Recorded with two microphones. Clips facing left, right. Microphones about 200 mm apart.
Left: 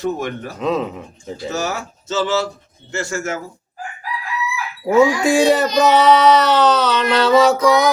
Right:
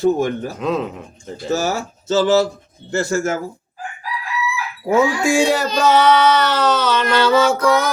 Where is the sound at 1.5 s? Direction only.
35° right (ahead or behind).